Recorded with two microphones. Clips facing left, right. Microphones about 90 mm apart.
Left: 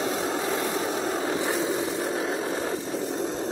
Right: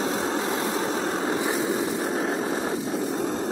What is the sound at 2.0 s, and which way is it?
Vehicle, 40° right (ahead or behind).